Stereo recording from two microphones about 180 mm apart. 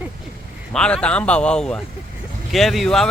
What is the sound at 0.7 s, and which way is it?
Speech, 5° left (ahead or behind).